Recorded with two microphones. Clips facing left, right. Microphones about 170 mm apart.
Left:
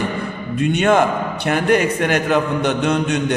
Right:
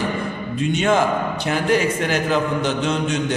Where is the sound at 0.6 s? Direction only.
60° left (ahead or behind).